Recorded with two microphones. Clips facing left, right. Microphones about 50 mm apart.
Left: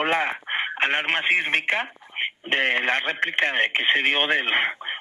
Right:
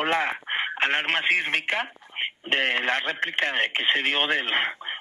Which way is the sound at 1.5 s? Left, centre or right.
Left.